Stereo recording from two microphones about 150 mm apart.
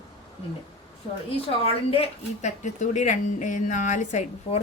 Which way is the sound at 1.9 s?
45° left (ahead or behind).